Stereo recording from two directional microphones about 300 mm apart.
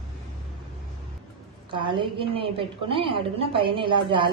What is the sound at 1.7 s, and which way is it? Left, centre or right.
A woman's voice, centre.